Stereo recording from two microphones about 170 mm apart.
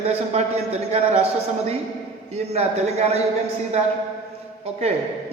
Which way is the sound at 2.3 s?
40° right (ahead or behind).